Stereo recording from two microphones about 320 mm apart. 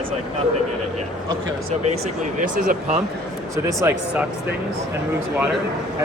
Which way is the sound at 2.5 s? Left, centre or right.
Right.